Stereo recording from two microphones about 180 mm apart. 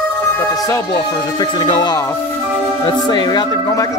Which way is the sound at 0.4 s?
20° left (ahead or behind).